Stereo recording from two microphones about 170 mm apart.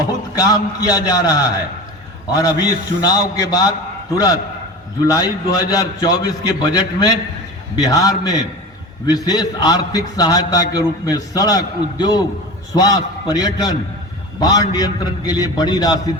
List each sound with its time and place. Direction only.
0.3 s a man's voice: 20° left (ahead or behind)